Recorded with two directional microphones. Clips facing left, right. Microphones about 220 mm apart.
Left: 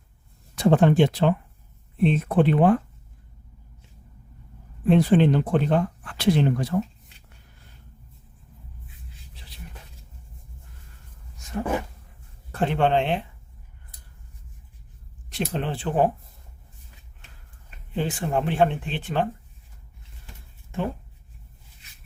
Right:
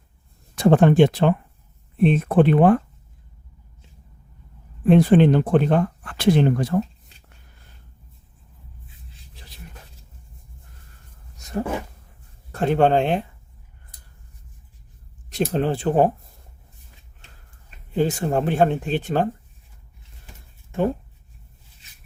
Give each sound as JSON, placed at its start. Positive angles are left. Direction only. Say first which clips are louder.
{"t": 0.5, "sound": "speech", "louder": "right 3 dB", "side_deg": -50}
{"t": 4.9, "sound": "speech", "louder": "right 4 dB", "side_deg": -50}
{"t": 11.3, "sound": "a sound", "louder": "right 3 dB", "side_deg": -40}
{"t": 12.7, "sound": "speech", "louder": "right 5 dB", "side_deg": -40}
{"t": 15.3, "sound": "speech", "louder": "right 6 dB", "side_deg": -40}
{"t": 17.9, "sound": "speech", "louder": "right 5 dB", "side_deg": -40}